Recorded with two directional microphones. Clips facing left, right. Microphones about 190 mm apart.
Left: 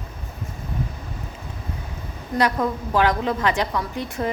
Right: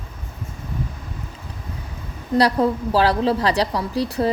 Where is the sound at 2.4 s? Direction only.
35° right (ahead or behind).